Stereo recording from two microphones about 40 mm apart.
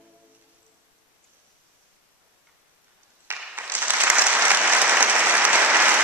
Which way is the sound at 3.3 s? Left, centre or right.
Right.